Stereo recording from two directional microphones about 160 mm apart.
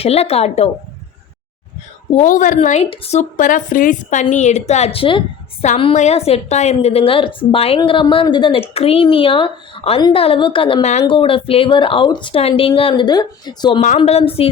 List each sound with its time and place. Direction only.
0.0 s speech: 40° left (ahead or behind)
2.1 s a woman's voice: 55° left (ahead or behind)
2.6 s a woman's voice: 40° left (ahead or behind)
13.8 s speech: 45° left (ahead or behind)